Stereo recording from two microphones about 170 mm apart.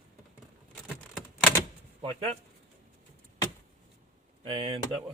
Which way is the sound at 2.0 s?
35° right (ahead or behind).